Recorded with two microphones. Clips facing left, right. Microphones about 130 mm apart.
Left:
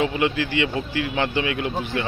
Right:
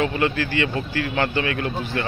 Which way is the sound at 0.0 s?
15° left (ahead or behind).